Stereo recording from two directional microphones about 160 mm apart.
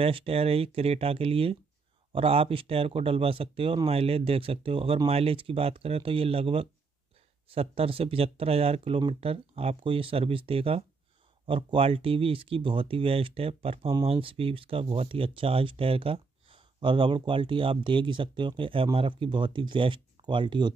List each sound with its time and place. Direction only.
0.0 s speech: 35° right (ahead or behind)